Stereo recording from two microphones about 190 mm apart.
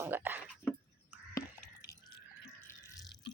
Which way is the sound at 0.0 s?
10° right (ahead or behind).